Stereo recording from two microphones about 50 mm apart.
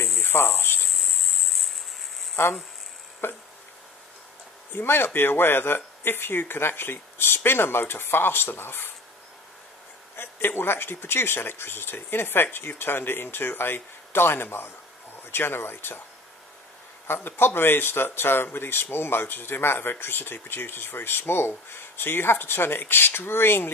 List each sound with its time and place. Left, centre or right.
0.2 s cricket: left
0.8 s cricket: centre
3.2 s speech: left
4.7 s speech: left
10.1 s speech: left
17.1 s speech: left